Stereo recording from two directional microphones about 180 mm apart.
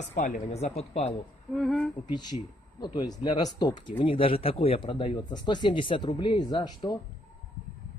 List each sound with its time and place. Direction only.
0.1 s speech: 40° left (ahead or behind)
1.5 s speech: centre (ahead or behind)
2.0 s speech: 25° left (ahead or behind)